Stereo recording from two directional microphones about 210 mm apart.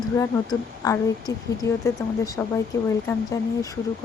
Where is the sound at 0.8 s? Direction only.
15° left (ahead or behind).